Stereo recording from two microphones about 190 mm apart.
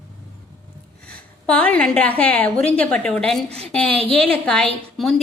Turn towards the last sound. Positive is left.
turn(degrees=0)  # may be behind; listen again after turning